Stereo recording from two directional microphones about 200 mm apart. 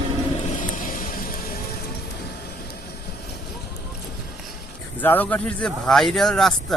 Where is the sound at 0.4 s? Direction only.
40° left (ahead or behind).